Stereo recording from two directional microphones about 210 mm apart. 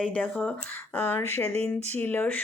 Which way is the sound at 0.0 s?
5° left (ahead or behind).